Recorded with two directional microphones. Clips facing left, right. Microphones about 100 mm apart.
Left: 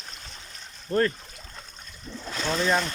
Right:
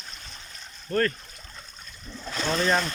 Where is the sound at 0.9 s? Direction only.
20° left (ahead or behind).